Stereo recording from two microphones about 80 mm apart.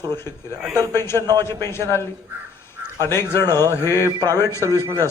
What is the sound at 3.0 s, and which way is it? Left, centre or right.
A man's voice, left.